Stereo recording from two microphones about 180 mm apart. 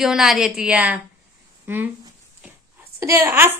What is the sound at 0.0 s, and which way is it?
A woman's voice, centre (ahead or behind).